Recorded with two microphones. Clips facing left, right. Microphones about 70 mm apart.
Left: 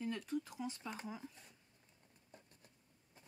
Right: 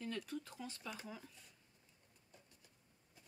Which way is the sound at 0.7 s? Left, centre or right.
Left.